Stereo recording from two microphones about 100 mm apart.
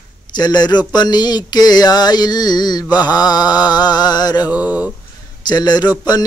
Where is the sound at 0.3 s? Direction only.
45° left (ahead or behind).